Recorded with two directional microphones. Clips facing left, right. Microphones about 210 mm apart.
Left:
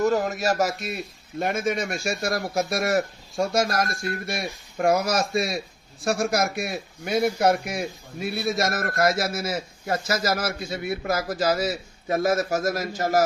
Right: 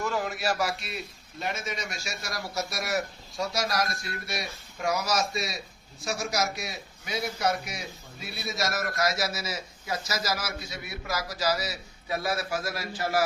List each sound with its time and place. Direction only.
0.0 s a man's voice: 40° left (ahead or behind)